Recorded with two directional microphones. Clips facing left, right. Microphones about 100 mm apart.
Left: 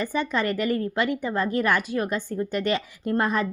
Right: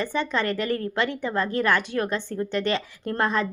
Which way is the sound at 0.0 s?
10° left (ahead or behind).